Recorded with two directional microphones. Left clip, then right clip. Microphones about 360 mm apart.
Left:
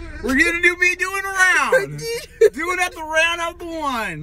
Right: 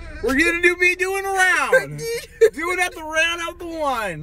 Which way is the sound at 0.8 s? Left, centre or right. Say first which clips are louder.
Even; centre.